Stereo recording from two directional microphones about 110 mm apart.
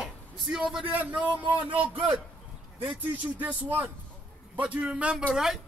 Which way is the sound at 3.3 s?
15° right (ahead or behind).